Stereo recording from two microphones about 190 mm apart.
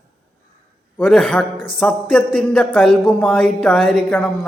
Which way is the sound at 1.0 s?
5° left (ahead or behind).